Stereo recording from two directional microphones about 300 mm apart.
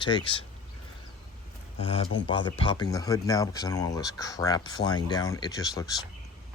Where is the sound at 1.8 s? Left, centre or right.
Centre.